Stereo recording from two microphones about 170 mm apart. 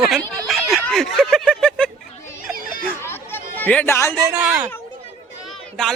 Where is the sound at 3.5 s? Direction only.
10° left (ahead or behind).